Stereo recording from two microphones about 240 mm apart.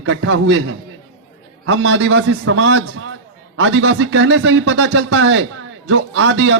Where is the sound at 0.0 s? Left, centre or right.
Right.